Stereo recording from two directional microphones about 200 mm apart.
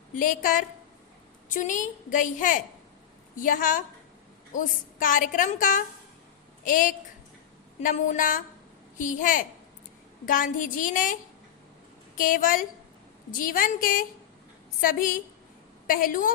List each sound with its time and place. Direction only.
0.1 s a woman's voice: 40° left (ahead or behind)